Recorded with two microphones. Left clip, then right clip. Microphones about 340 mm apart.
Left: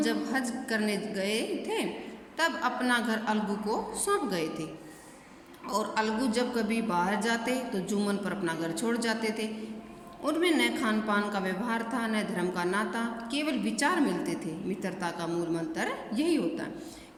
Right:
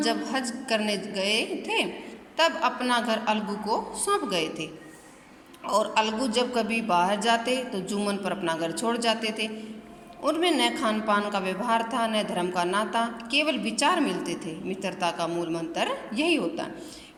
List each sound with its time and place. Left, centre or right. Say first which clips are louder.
0.0 s a woman's voice: right 3 dB; centre